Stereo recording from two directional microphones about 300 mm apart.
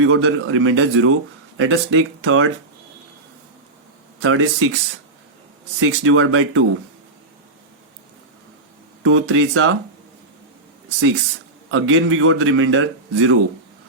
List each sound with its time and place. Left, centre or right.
0.0 s a man's voice: right
4.2 s a man's voice: right
5.8 s a man's voice: right
9.0 s speech: right
11.7 s a man's voice: right